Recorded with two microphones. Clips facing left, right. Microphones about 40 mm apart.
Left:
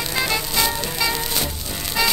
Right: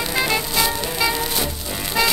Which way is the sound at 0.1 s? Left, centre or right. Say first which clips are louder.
Right 1 dB; centre.